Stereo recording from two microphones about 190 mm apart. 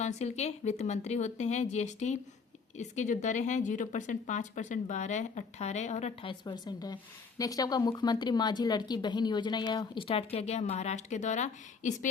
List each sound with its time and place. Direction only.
0.0 s speech: 35° left (ahead or behind)
6.4 s speech: 20° left (ahead or behind); by 11.9 s 40° left (ahead or behind)